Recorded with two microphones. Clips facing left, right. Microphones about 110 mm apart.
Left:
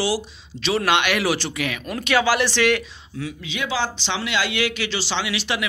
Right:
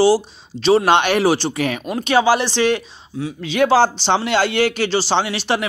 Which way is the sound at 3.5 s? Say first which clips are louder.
Right 12 dB; 50° right (ahead or behind).